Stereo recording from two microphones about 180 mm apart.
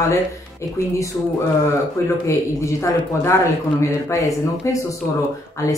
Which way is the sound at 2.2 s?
15° left (ahead or behind).